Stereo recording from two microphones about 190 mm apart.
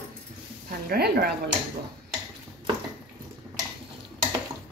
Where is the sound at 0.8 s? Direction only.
55° right (ahead or behind).